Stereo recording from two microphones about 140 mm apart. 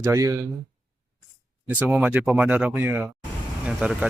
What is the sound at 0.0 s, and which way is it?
Speech, 20° right (ahead or behind).